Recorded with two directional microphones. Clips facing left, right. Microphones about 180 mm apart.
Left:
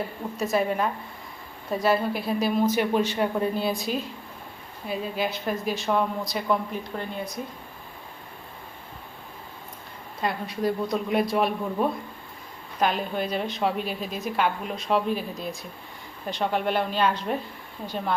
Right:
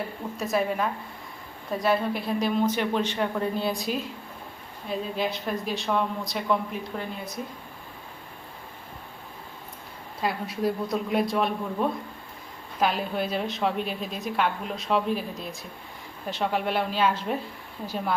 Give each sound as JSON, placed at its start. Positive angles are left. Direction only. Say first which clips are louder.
{"t": 0.3, "sound": "a woman's voice", "louder": "left 2 dB", "side_deg": 0}
{"t": 10.2, "sound": "a woman's voice", "louder": "even", "side_deg": -5}